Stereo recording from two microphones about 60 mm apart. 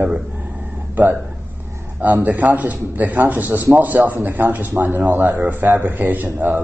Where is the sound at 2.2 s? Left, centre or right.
Right.